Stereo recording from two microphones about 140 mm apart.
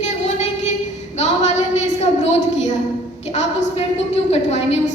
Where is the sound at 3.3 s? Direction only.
55° left (ahead or behind).